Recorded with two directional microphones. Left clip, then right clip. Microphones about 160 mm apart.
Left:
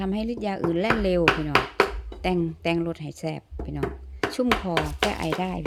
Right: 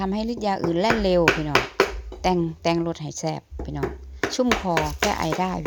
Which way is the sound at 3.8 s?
30° right (ahead or behind).